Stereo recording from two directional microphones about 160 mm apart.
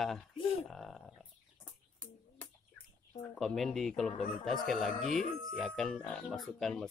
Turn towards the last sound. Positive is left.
turn(degrees=0)  # may be behind; listen again after turning